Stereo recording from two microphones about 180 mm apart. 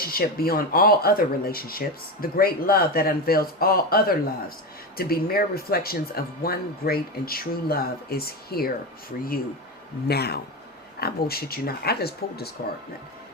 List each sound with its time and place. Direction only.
0.0 s speech: 55° left (ahead or behind)